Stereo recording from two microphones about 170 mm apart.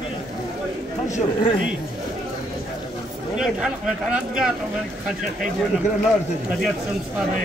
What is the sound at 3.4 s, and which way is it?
Speech, 5° right (ahead or behind).